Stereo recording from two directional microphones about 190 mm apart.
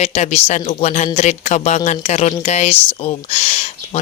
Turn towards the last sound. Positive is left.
turn(degrees=35)  # may be behind; listen again after turning